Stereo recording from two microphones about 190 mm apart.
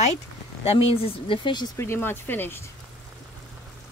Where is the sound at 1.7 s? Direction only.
15° left (ahead or behind).